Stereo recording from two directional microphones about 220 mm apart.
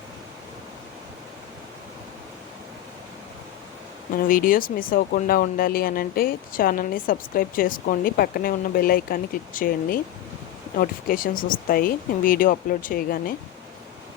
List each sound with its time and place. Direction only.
4.1 s speech: 40° left (ahead or behind)